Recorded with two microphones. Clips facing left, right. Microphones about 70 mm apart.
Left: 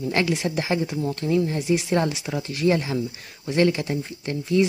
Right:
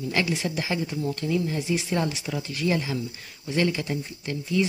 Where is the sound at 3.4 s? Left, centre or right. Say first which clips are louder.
Left 5 dB; left.